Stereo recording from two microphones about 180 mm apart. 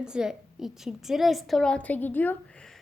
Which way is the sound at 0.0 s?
5° right (ahead or behind).